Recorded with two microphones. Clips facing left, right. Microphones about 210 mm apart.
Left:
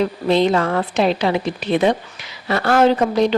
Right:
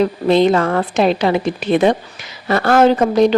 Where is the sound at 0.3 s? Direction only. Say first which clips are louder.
Right 3 dB; 50° right (ahead or behind).